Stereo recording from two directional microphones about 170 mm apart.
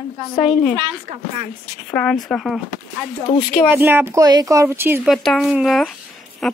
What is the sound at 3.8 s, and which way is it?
Speech, 15° right (ahead or behind).